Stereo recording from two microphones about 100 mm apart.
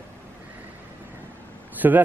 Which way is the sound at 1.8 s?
20° right (ahead or behind).